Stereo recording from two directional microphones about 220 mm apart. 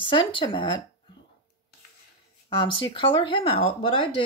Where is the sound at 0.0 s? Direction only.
20° left (ahead or behind).